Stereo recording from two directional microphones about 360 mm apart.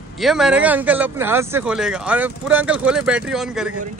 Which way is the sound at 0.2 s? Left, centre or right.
Centre.